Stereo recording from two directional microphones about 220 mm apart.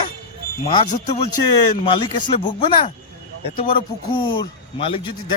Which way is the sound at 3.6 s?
25° left (ahead or behind).